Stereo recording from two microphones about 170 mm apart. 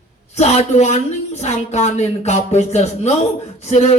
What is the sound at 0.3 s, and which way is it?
A man's voice, 40° left (ahead or behind).